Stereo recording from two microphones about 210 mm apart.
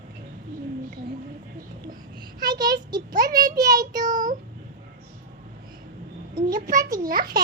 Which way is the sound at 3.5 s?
15° right (ahead or behind).